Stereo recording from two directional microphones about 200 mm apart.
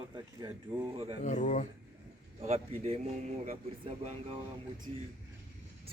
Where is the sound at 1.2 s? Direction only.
35° left (ahead or behind).